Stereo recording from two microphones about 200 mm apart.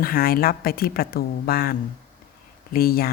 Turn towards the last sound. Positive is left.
turn(degrees=50)  # may be behind; listen again after turning